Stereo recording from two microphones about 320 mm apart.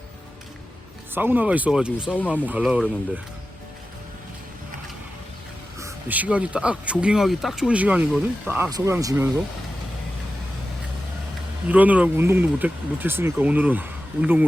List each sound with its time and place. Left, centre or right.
1.1 s speech: centre
5.8 s speech: centre
11.7 s speech: centre